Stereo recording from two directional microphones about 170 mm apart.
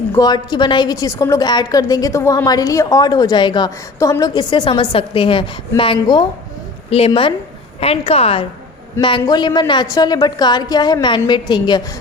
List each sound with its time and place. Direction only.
0.1 s a woman's voice: 25° left (ahead or behind)